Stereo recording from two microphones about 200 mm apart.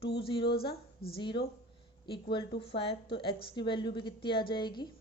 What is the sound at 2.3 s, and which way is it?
A woman's voice, 25° left (ahead or behind).